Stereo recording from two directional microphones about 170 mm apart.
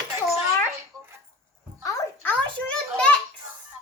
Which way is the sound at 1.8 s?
10° left (ahead or behind).